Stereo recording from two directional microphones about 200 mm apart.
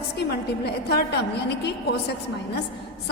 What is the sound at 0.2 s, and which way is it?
A woman's voice, 55° left (ahead or behind).